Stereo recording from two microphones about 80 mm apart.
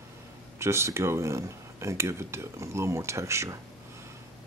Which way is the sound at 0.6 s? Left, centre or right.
Right.